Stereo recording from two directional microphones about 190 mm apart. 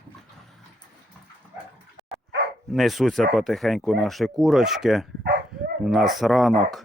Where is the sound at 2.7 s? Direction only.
Centre (ahead or behind).